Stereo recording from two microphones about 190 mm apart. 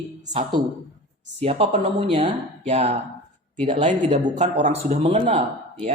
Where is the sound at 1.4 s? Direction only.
30° right (ahead or behind).